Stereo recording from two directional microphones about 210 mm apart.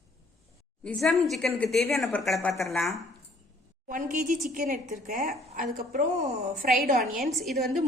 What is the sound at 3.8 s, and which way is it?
A woman's voice, 40° right (ahead or behind).